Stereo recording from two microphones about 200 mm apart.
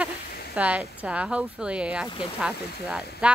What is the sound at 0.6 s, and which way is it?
Speech, 5° right (ahead or behind).